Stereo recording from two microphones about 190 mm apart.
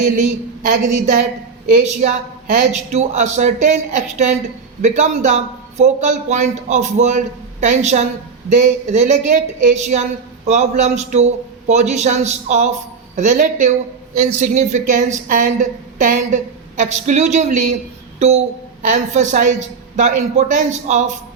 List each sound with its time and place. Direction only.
0.6 s a woman's voice: 45° right (ahead or behind)